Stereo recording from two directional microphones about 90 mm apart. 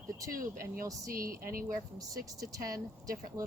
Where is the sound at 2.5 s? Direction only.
40° right (ahead or behind).